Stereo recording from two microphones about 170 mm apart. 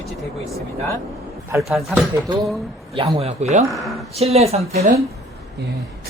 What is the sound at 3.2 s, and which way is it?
Speech, 40° right (ahead or behind).